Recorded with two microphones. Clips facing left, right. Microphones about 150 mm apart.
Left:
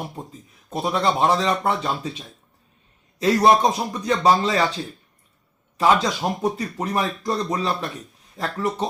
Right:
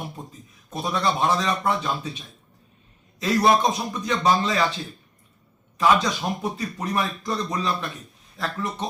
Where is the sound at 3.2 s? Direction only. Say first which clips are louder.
Left 3 dB; 35° left (ahead or behind).